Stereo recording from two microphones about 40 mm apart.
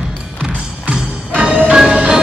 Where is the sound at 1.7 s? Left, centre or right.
Centre.